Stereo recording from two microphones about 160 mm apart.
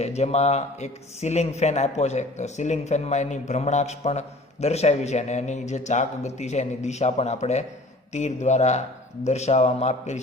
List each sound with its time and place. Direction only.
0.0 s speech: 40° left (ahead or behind)